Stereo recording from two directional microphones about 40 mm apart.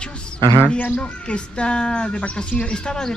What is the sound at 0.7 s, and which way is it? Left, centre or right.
Speech, left.